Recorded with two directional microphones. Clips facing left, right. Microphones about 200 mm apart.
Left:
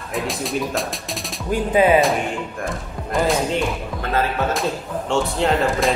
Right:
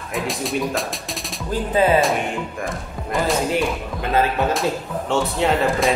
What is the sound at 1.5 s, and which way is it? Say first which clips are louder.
Speech: left 2 dB; 15° left (ahead or behind).